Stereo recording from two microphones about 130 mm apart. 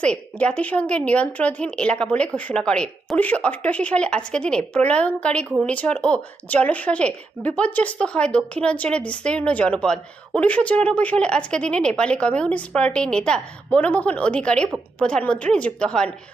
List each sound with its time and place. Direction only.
0.0 s speech: 10° left (ahead or behind)